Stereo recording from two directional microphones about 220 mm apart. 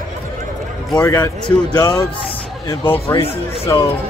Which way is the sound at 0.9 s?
15° left (ahead or behind).